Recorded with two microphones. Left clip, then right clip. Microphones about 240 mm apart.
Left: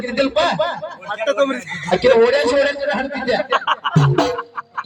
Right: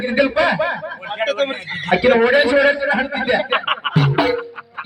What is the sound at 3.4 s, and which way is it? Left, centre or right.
Music, centre.